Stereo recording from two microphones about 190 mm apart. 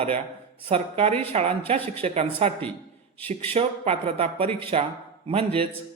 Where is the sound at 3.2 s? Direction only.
10° left (ahead or behind).